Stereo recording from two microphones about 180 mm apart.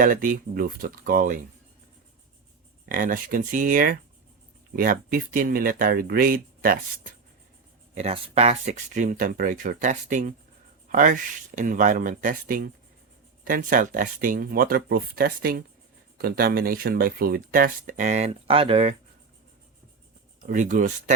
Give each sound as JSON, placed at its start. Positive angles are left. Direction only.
{"t": 0.0, "sound": "speech", "side_deg": -50}
{"t": 2.9, "sound": "speech", "side_deg": -50}
{"t": 7.9, "sound": "speech", "side_deg": -35}
{"t": 20.5, "sound": "speech", "side_deg": -45}